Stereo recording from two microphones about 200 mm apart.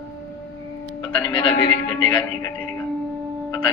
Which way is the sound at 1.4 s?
25° left (ahead or behind).